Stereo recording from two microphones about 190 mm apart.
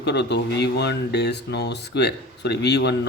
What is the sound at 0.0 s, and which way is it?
Speech, 60° left (ahead or behind).